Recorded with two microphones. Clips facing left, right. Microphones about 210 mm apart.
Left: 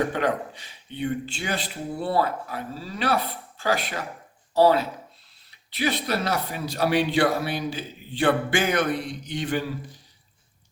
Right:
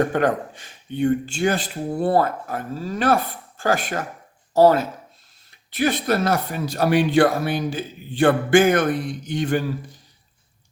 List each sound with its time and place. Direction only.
0.1 s speech: 50° right (ahead or behind)